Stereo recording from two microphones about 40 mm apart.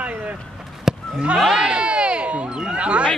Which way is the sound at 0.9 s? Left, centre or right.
Centre.